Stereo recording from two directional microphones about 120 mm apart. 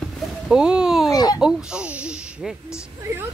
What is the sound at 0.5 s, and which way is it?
Speech, 5° right (ahead or behind).